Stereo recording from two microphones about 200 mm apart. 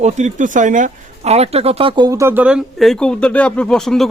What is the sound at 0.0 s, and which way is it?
Speech, 35° right (ahead or behind).